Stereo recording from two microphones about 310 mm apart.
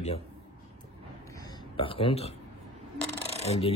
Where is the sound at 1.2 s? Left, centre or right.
Centre.